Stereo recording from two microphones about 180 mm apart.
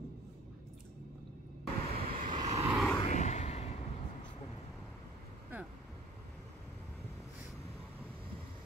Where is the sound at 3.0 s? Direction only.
40° left (ahead or behind).